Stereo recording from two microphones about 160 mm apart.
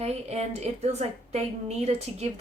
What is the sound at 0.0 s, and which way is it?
A woman's voice, 40° right (ahead or behind).